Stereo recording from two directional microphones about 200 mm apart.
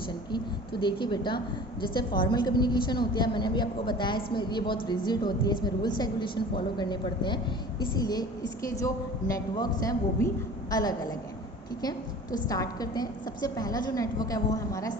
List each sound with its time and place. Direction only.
0.3 s a woman's voice: 25° left (ahead or behind)